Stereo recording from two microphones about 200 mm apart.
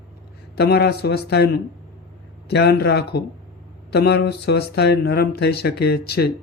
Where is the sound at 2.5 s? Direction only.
55° left (ahead or behind).